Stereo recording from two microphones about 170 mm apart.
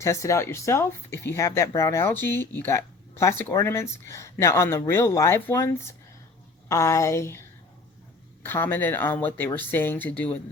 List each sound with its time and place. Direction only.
0.0 s speech: 15° left (ahead or behind)
8.4 s speech: 10° left (ahead or behind)